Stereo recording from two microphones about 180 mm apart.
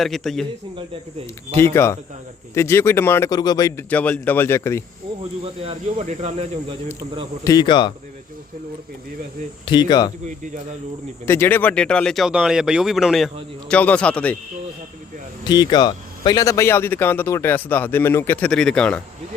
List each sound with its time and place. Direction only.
0.0 s speech: centre (ahead or behind)
1.5 s speech: 15° left (ahead or behind)
5.6 s speech: 35° right (ahead or behind)
7.4 s speech: 20° left (ahead or behind)
9.6 s speech: 25° left (ahead or behind)
10.2 s speech: 45° right (ahead or behind)
11.3 s speech: 10° left (ahead or behind)
15.4 s speech: 25° left (ahead or behind); by 18.9 s 5° left (ahead or behind)